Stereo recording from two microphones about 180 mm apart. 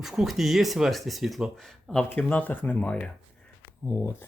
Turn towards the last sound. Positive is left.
turn(degrees=15)  # may be behind; listen again after turning